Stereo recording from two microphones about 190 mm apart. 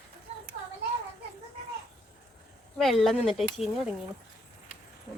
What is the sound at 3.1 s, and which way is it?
Speech, centre (ahead or behind).